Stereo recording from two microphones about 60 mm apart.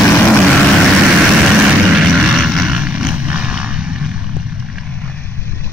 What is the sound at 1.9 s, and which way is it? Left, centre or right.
Vehicle, centre.